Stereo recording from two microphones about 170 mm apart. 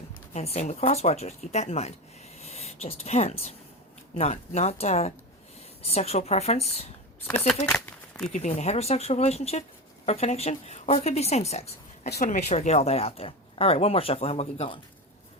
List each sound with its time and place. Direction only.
0.3 s speech: 40° left (ahead or behind)
7.3 s speech: 5° left (ahead or behind)
8.3 s speech: 45° left (ahead or behind)
12.0 s speech: 65° left (ahead or behind); by 14.8 s 35° left (ahead or behind)